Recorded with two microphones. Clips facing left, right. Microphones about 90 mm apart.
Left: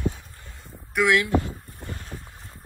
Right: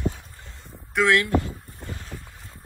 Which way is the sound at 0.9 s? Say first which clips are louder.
Even; 10° left (ahead or behind).